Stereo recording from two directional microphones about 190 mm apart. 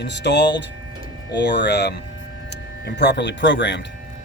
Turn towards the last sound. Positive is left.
turn(degrees=70)  # may be behind; listen again after turning